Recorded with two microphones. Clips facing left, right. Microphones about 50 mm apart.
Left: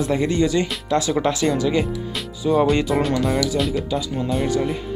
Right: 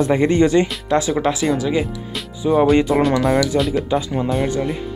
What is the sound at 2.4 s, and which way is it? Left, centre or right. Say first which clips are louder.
Music: right 2 dB; centre.